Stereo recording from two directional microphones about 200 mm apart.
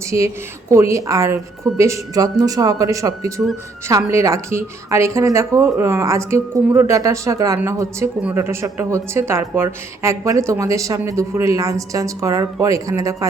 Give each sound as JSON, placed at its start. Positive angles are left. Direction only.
{"t": 0.7, "sound": "a woman's voice", "side_deg": -15}